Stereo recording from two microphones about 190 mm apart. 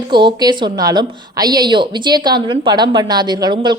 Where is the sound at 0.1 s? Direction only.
25° right (ahead or behind).